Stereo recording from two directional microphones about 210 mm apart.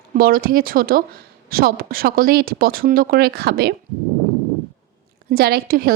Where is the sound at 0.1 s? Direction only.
40° right (ahead or behind).